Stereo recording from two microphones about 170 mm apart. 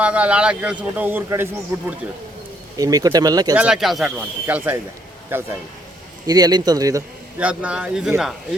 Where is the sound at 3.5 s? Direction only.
5° right (ahead or behind).